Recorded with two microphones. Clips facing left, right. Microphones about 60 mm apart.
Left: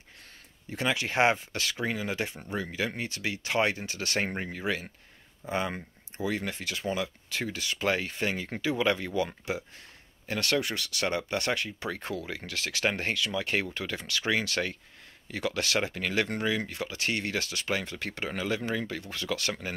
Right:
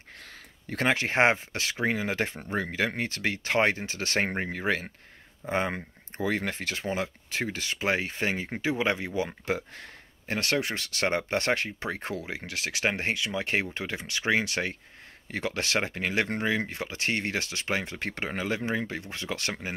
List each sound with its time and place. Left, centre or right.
0.7 s speech: right